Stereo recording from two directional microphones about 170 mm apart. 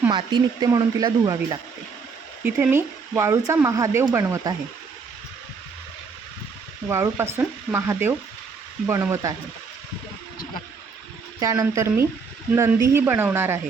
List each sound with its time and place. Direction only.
0.1 s speech: 25° right (ahead or behind)
2.6 s speech: 15° right (ahead or behind)
6.8 s speech: 15° right (ahead or behind)
11.3 s speech: 15° right (ahead or behind)